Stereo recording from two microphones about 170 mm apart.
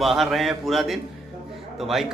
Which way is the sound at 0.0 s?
Centre (ahead or behind).